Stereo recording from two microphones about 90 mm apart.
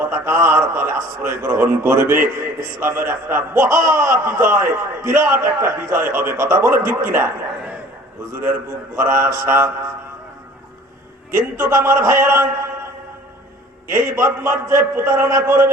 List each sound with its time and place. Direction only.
0.1 s a man's voice: 30° right (ahead or behind)
2.6 s a man's voice: 40° right (ahead or behind)
2.9 s a man's voice: 25° right (ahead or behind)
9.0 s a man's voice: 35° right (ahead or behind)
11.3 s a man's voice: 30° right (ahead or behind)
13.9 s a man's voice: 30° right (ahead or behind)